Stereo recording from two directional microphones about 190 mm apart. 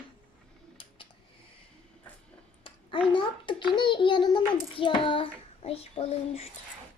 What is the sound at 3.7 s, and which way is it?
Child singing, 25° left (ahead or behind).